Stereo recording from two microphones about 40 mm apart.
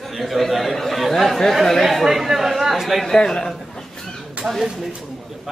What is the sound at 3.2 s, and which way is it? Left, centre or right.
Speech, centre.